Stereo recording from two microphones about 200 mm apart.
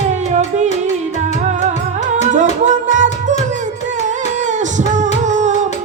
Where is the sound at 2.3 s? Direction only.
40° right (ahead or behind).